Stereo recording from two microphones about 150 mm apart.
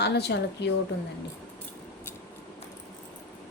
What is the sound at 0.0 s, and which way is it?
Speech, 90° left.